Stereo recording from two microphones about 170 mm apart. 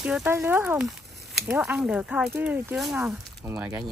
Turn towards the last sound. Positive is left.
turn(degrees=-15)  # may be behind; listen again after turning